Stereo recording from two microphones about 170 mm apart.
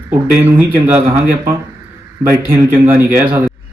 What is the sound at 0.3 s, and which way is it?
A man's voice, 10° right (ahead or behind).